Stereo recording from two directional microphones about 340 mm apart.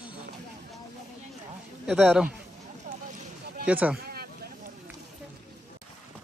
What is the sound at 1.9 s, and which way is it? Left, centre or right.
Speech, centre.